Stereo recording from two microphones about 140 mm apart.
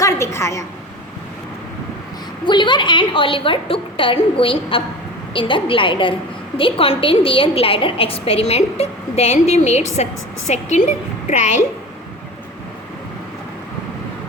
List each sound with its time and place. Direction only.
0.0 s a woman's voice: 20° left (ahead or behind)
2.5 s a woman's voice: 35° left (ahead or behind); by 11.6 s 55° left (ahead or behind)